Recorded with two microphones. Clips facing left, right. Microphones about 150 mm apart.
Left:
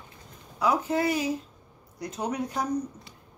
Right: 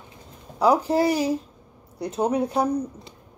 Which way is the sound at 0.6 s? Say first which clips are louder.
Right 6 dB; 35° right (ahead or behind).